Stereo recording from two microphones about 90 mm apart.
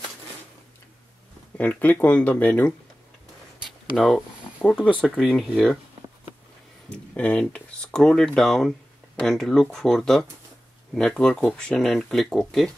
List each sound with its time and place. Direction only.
1.6 s speech: 15° left (ahead or behind)
3.6 s a sound: centre (ahead or behind)
4.7 s speech: 10° left (ahead or behind)
7.2 s speech: 15° left (ahead or behind)